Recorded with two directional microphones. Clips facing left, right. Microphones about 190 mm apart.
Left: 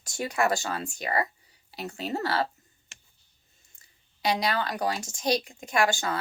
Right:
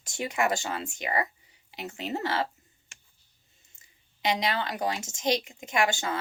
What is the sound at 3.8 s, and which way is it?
A woman's voice, 20° right (ahead or behind).